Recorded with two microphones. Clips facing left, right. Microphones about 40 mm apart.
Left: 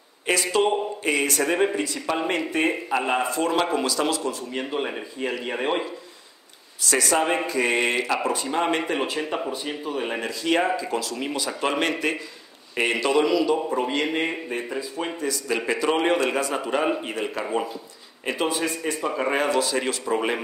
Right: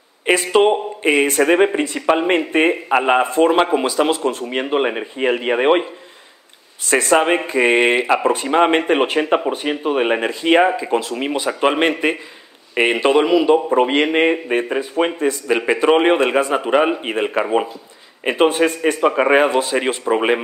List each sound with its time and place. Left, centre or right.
0.3 s a man's voice: right